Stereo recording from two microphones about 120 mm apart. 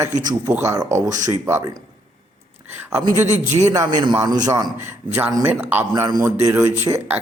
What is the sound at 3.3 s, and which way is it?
Speech, 70° right (ahead or behind).